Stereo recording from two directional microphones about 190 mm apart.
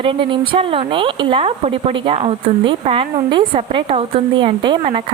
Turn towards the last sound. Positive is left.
turn(degrees=-25)  # may be behind; listen again after turning